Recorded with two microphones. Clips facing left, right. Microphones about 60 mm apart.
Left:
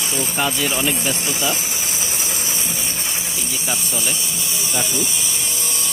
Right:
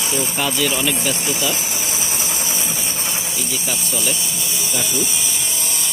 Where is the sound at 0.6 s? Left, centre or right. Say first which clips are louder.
Right 1 dB; left.